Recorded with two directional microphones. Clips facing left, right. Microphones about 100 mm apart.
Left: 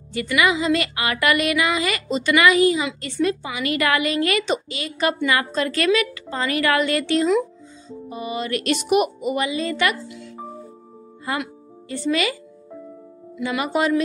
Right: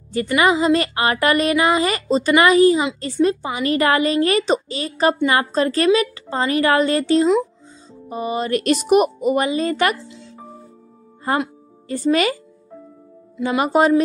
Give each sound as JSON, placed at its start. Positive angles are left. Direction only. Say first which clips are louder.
{"t": 0.1, "sound": "a woman's voice", "louder": "right 3 dB", "side_deg": -35}
{"t": 11.2, "sound": "speech", "louder": "right 6 dB", "side_deg": -35}
{"t": 13.4, "sound": "a woman's voice", "louder": "right 5 dB", "side_deg": -35}